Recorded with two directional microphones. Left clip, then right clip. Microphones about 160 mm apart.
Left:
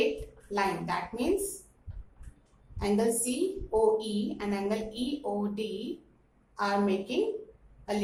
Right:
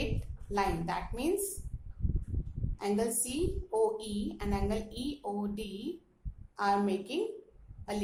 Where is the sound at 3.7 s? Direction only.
60° right (ahead or behind).